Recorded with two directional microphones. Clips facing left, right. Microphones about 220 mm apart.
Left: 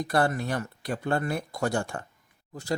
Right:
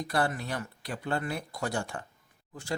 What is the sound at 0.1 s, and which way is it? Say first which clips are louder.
Speech: left 5 dB; 45° left (ahead or behind).